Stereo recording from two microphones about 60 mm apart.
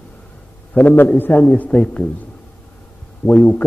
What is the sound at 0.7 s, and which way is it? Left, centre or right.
A man's voice, left.